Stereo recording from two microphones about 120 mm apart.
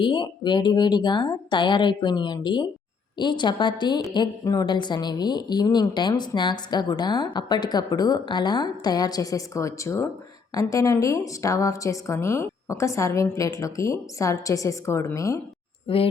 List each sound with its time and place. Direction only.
0.0 s a woman's voice: 40° left (ahead or behind)
15.9 s speech: 50° left (ahead or behind)